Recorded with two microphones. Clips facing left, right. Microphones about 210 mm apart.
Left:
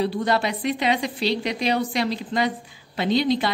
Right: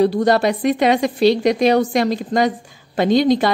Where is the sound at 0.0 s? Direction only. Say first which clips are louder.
Right 8 dB; 40° right (ahead or behind).